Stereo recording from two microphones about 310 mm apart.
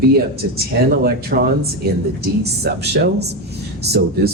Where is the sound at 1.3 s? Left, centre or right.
Right.